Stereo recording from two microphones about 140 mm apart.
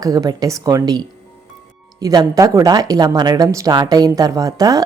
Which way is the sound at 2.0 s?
25° right (ahead or behind).